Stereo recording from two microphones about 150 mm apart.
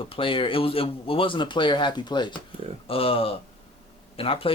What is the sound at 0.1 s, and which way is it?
Speech, 35° left (ahead or behind).